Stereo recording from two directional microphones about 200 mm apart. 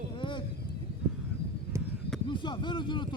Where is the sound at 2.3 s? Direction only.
25° left (ahead or behind).